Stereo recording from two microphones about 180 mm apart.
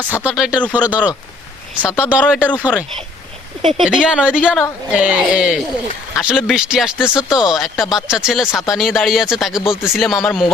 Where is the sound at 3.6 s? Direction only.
35° right (ahead or behind).